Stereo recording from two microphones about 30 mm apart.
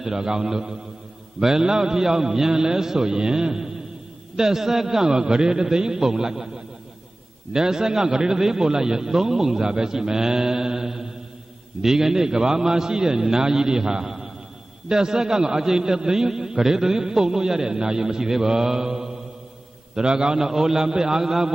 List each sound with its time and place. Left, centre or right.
0.0 s a man's voice: centre
5.0 s a man's voice: right
20.3 s a man's voice: centre